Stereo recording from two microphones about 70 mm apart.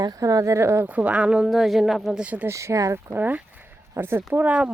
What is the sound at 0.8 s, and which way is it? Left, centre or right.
Speech, right.